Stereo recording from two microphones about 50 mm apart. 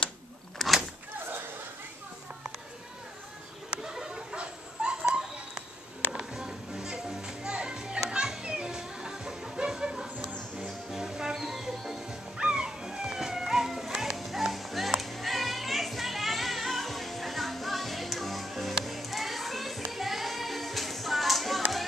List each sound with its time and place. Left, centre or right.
0.6 s vehicle: centre
3.7 s a sound: centre
6.1 s music: centre
18.9 s children playing: centre
19.9 s music: centre